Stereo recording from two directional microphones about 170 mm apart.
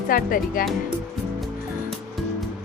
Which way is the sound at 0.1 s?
55° left (ahead or behind).